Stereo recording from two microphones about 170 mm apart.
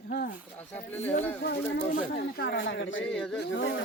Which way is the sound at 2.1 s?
70° left (ahead or behind).